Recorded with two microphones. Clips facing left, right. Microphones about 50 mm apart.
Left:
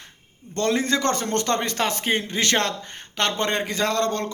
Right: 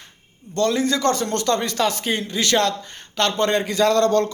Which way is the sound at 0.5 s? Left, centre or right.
Left.